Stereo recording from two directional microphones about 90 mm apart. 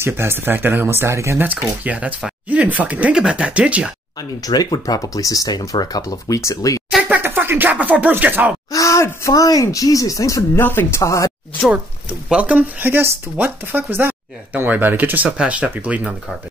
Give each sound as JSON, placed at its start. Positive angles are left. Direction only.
{"t": 0.0, "sound": "speech", "side_deg": -25}
{"t": 1.4, "sound": "speech", "side_deg": -15}
{"t": 4.2, "sound": "speech", "side_deg": 45}
{"t": 7.0, "sound": "speech", "side_deg": -20}
{"t": 8.7, "sound": "speech", "side_deg": 35}
{"t": 10.6, "sound": "speech", "side_deg": 25}
{"t": 11.0, "sound": "speech", "side_deg": 35}
{"t": 12.3, "sound": "speech", "side_deg": -15}